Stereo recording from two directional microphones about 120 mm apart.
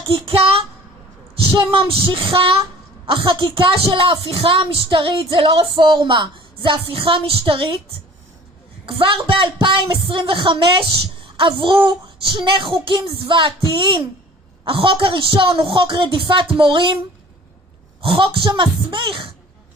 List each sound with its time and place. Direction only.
1.5 s a woman's voice: 45° right (ahead or behind)
8.9 s a woman's voice: 45° right (ahead or behind)
18.0 s a woman's voice: 45° right (ahead or behind)